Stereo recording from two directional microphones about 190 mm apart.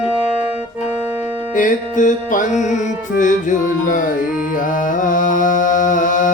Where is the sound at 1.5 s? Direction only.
45° left (ahead or behind).